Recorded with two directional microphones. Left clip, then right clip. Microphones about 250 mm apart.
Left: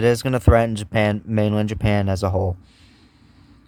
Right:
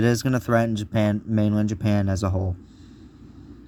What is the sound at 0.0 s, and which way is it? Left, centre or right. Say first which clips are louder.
Speech: left 5 dB; centre.